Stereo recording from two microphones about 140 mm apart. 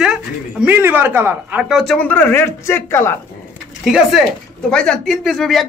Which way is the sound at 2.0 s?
10° left (ahead or behind).